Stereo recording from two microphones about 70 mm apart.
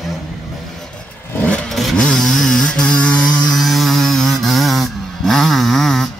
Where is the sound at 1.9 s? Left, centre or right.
Centre.